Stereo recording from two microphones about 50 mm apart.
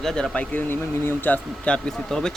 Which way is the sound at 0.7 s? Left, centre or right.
Left.